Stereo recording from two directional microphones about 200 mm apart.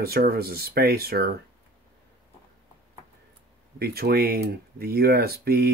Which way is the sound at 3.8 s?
50° right (ahead or behind).